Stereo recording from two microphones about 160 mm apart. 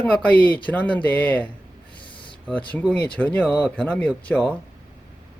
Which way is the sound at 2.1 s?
30° left (ahead or behind).